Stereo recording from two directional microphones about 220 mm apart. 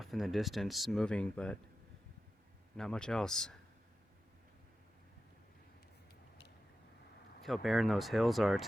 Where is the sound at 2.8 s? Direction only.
5° left (ahead or behind).